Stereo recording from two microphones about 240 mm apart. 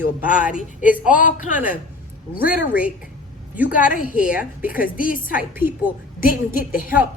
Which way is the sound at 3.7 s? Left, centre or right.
Left.